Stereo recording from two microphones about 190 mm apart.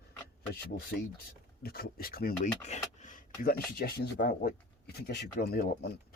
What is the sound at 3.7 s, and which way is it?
Speech, 55° left (ahead or behind).